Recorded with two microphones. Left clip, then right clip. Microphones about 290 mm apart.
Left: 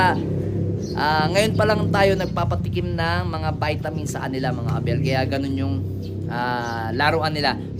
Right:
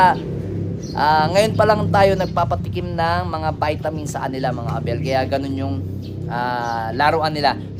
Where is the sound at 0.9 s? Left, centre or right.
Centre.